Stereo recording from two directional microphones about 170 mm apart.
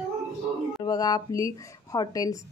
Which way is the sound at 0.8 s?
25° left (ahead or behind).